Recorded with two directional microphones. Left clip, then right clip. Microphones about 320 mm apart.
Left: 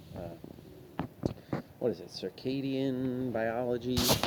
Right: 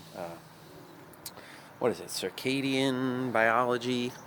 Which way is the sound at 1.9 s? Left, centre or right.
Centre.